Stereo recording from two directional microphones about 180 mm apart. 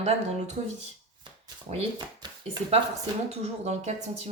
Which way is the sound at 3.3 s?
40° right (ahead or behind).